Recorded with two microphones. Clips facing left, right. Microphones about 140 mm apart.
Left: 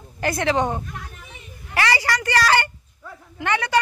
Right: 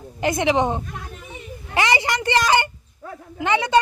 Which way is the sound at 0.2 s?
20° right (ahead or behind).